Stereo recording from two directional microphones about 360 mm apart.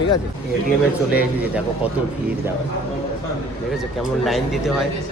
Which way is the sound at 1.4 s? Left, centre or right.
Centre.